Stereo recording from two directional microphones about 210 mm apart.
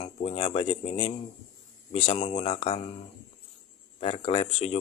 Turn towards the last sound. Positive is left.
turn(degrees=30)  # may be behind; listen again after turning